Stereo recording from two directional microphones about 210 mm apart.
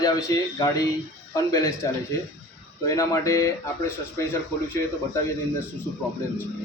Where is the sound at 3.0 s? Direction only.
15° left (ahead or behind).